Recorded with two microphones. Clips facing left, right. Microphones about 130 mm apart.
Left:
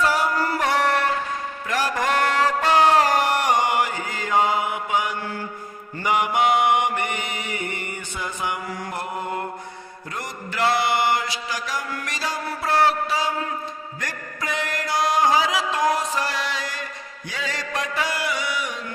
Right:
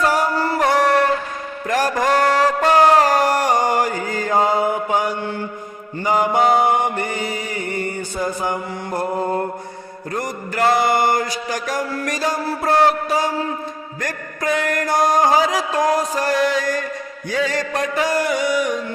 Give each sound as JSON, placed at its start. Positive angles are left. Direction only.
{"t": 0.0, "sound": "music", "side_deg": -45}
{"t": 0.3, "sound": "music", "side_deg": -30}
{"t": 0.6, "sound": "music", "side_deg": -40}
{"t": 2.6, "sound": "chant", "side_deg": -45}
{"t": 6.0, "sound": "mantra", "side_deg": -35}
{"t": 10.2, "sound": "music", "side_deg": -45}
{"t": 14.0, "sound": "mantra", "side_deg": -50}
{"t": 17.3, "sound": "music", "side_deg": -45}